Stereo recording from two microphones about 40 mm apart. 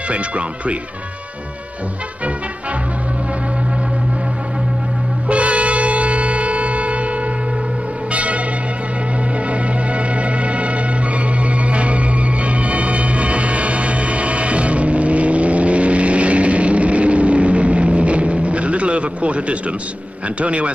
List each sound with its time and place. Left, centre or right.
5.3 s a sound: right
8.1 s church bell: right
9.5 s music: right
20.3 s a man's voice: right